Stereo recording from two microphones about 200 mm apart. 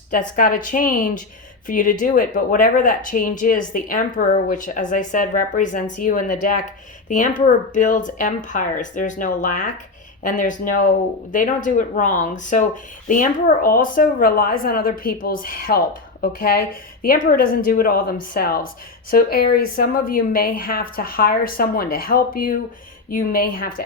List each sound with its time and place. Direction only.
0.1 s speech: 45° left (ahead or behind)